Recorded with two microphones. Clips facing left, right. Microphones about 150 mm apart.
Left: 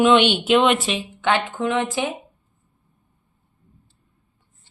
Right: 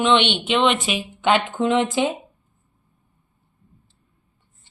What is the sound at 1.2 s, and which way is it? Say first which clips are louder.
Speech: right 2 dB; 20° right (ahead or behind).